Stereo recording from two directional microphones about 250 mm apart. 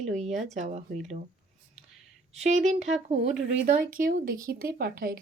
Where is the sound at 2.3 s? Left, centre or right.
Right.